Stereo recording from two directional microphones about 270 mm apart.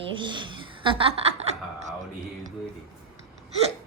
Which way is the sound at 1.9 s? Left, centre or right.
Right.